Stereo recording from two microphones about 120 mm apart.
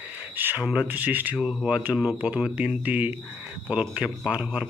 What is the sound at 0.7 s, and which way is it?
Speech, 15° right (ahead or behind).